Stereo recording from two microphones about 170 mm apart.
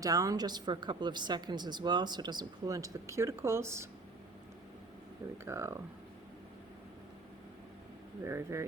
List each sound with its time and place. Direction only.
0.0 s a woman's voice: 20° right (ahead or behind)
5.5 s speech: 15° right (ahead or behind)
8.2 s speech: 15° right (ahead or behind)